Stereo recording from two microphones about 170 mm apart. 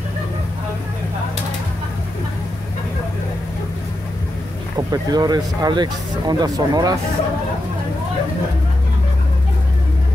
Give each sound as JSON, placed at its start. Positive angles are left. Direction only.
{"t": 4.7, "sound": "speech", "side_deg": -25}